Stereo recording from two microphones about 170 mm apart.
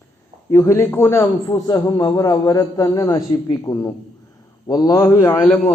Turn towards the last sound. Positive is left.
turn(degrees=10)  # may be behind; listen again after turning